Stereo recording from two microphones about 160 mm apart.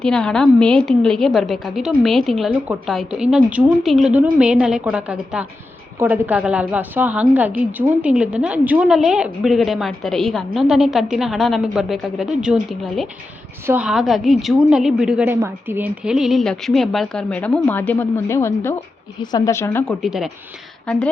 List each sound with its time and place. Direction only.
0.0 s a woman's voice: 5° left (ahead or behind)
19.8 s a woman's voice: centre (ahead or behind)